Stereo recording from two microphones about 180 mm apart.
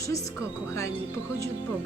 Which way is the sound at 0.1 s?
15° left (ahead or behind).